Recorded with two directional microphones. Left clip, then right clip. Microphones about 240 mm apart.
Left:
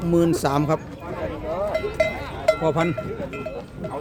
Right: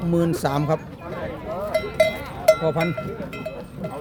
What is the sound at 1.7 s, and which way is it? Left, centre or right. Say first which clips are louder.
Cowbell: right 5 dB; right.